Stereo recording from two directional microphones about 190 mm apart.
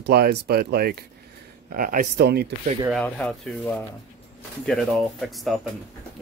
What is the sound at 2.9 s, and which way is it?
Speech, 5° left (ahead or behind).